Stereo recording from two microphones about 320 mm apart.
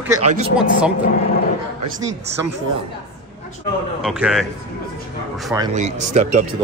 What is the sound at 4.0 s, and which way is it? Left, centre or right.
Speech, centre.